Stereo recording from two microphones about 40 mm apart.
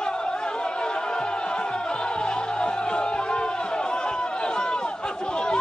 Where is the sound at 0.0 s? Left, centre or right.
Left.